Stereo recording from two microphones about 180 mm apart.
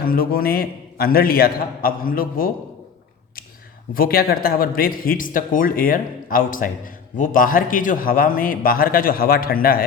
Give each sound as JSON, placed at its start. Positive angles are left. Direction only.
{"t": 0.0, "sound": "a man's voice", "side_deg": 55}
{"t": 3.9, "sound": "speech", "side_deg": 55}